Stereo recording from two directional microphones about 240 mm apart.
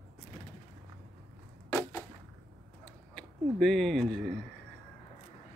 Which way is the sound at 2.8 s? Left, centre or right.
Centre.